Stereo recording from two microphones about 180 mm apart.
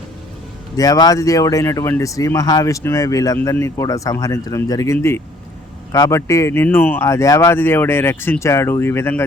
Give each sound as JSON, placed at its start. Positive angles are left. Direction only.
{"t": 0.8, "sound": "speech", "side_deg": 20}